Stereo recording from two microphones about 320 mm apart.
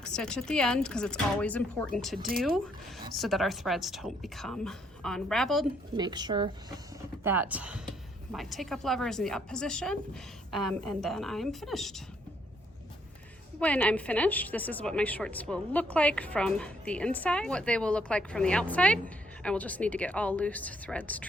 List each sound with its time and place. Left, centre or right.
0.0 s a woman's voice: centre
2.1 s speech: right
3.2 s a woman's voice: centre
6.0 s a woman's voice: centre
13.6 s a woman's voice: centre